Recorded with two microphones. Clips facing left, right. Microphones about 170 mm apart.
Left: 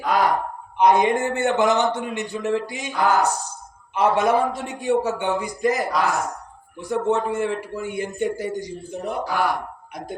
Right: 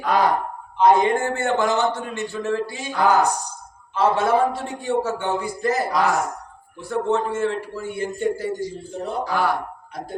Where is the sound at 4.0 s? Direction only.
15° left (ahead or behind).